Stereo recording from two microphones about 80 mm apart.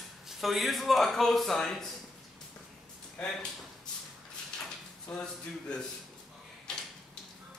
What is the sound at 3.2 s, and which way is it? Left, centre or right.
Speech, centre.